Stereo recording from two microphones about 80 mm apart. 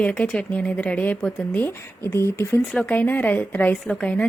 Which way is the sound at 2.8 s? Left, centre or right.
Left.